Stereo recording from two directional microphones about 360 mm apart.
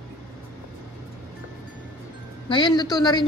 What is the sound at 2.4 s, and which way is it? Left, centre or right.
Speech, centre.